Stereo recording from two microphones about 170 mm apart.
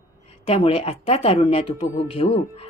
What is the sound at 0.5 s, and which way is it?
Speech, 35° left (ahead or behind).